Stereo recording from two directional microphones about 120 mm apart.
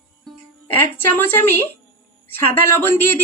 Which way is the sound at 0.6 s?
20° left (ahead or behind).